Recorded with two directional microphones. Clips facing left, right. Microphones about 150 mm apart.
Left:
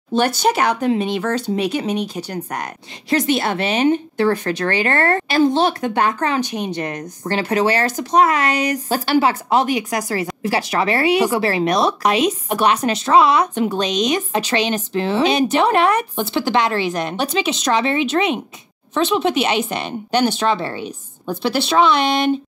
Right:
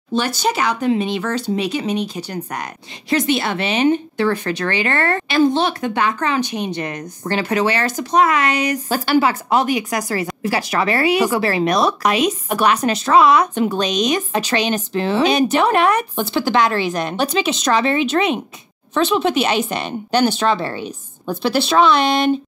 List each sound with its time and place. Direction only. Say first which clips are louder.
0.1 s speech: left 3 dB; 55° left (ahead or behind); by 17.1 s 25° left (ahead or behind)
17.2 s speech: right 2 dB; 15° left (ahead or behind)